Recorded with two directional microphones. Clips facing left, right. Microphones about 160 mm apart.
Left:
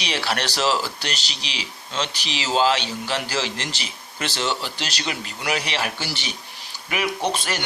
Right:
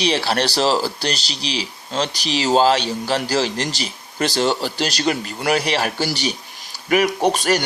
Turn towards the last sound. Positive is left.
turn(degrees=-45)  # may be behind; listen again after turning